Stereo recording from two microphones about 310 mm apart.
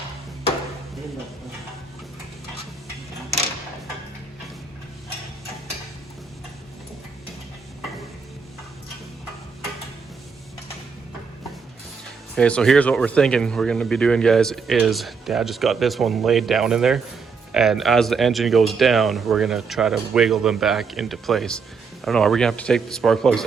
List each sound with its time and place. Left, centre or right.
12.4 s speech: centre